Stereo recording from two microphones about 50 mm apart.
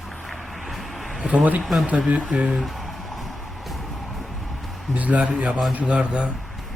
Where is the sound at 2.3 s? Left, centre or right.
Right.